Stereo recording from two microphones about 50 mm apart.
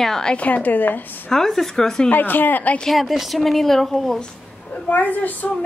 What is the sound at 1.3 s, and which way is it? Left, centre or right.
Speech, centre.